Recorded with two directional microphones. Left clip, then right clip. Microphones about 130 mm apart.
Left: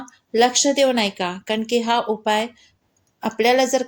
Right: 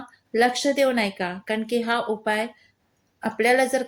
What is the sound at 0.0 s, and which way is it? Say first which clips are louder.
A woman's voice: left 3 dB; 40° left (ahead or behind).